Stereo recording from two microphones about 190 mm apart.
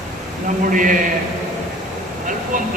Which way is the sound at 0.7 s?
45° right (ahead or behind).